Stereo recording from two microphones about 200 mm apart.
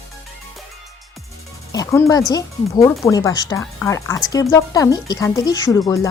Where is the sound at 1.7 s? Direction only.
15° left (ahead or behind).